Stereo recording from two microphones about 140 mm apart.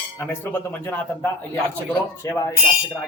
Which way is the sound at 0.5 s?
15° left (ahead or behind).